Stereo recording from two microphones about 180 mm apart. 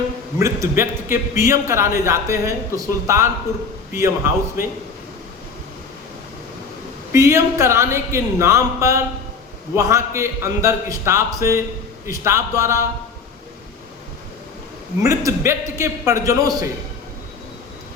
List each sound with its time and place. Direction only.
0.3 s a man's voice: 15° right (ahead or behind)
7.1 s a man's voice: 15° right (ahead or behind)
15.0 s a man's voice: 15° right (ahead or behind)